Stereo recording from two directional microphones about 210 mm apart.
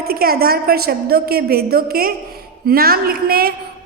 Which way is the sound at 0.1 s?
45° right (ahead or behind).